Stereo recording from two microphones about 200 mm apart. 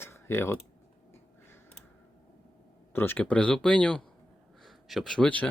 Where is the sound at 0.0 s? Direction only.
10° left (ahead or behind).